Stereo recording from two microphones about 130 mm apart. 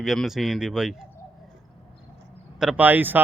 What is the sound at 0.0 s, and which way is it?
Speech, centre (ahead or behind).